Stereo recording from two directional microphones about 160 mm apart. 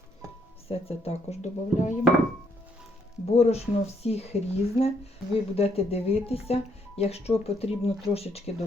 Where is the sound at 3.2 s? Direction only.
40° left (ahead or behind).